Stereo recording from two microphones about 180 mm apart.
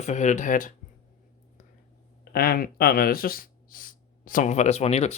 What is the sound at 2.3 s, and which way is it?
Speech, 55° left (ahead or behind).